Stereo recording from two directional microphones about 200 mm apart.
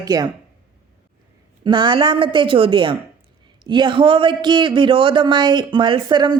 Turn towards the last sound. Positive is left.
turn(degrees=-20)  # may be behind; listen again after turning